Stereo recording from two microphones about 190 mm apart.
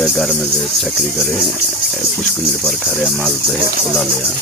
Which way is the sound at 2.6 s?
5° left (ahead or behind).